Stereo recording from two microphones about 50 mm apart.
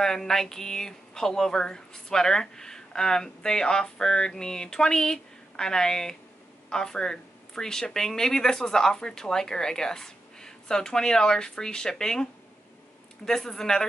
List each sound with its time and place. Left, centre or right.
0.0 s speech: centre